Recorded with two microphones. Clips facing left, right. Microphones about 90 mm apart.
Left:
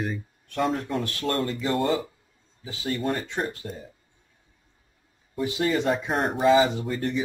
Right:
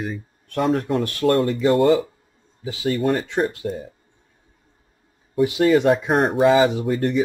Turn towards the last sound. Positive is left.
turn(degrees=-60)  # may be behind; listen again after turning